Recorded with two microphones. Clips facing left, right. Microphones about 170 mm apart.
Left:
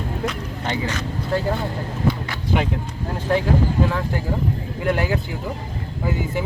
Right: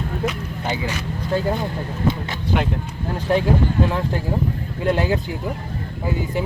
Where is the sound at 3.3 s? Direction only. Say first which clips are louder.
Right 1 dB; 20° right (ahead or behind).